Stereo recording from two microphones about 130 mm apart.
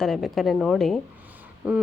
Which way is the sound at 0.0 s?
Centre (ahead or behind).